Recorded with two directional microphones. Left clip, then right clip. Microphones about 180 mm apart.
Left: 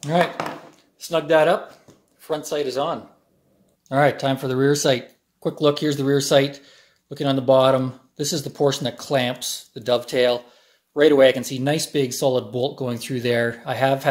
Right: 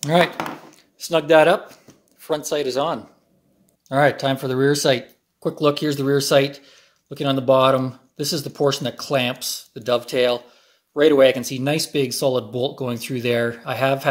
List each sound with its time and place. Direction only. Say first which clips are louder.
0.0 s speech: right 3 dB; 40° right (ahead or behind)
3.9 s speech: right 1 dB; 10° right (ahead or behind)